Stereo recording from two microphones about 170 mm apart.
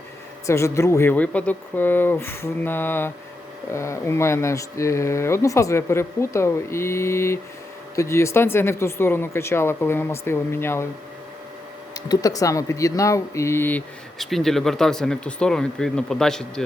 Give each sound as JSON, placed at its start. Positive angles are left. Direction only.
{"t": 0.4, "sound": "speech", "side_deg": 15}
{"t": 11.9, "sound": "speech", "side_deg": 25}